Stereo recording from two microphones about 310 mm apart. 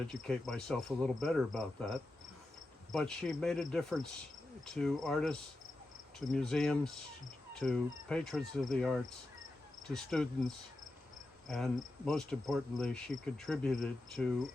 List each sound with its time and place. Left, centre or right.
0.1 s cricket: centre